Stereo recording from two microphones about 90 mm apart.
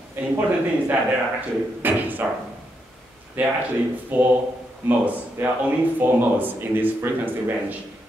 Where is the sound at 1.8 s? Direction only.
20° right (ahead or behind).